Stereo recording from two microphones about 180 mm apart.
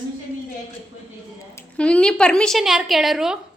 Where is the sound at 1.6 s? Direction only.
5° left (ahead or behind).